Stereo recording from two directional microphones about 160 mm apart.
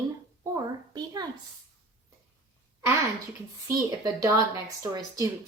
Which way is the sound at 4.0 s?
20° right (ahead or behind).